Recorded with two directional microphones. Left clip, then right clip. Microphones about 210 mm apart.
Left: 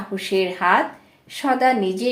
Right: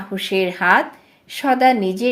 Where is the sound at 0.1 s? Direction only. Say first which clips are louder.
Right 2 dB; 40° right (ahead or behind).